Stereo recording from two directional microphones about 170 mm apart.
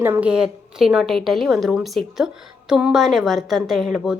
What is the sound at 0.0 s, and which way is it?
A woman's voice, 10° right (ahead or behind).